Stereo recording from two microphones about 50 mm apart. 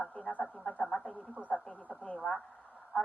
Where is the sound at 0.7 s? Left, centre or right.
Centre.